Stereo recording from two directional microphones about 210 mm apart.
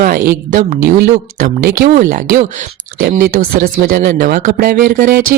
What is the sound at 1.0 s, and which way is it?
Speech, 45° right (ahead or behind).